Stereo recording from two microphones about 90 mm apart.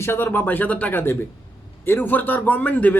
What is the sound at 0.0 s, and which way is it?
A man's voice, 25° left (ahead or behind).